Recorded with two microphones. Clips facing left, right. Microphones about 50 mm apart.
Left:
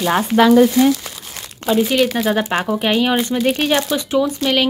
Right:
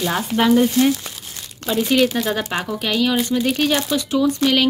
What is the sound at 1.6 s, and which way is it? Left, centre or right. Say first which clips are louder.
Speech: left 2 dB; centre.